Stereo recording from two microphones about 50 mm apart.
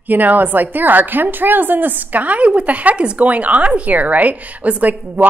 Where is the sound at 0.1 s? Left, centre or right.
Right.